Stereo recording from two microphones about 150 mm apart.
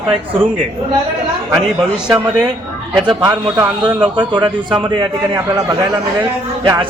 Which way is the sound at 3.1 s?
25° right (ahead or behind).